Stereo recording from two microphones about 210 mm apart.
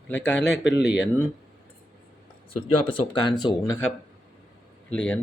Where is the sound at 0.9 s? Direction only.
55° left (ahead or behind).